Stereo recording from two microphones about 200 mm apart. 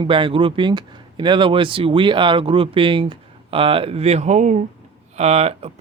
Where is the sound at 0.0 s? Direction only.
25° right (ahead or behind).